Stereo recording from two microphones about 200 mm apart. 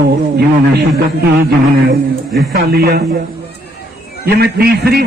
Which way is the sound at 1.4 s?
50° right (ahead or behind).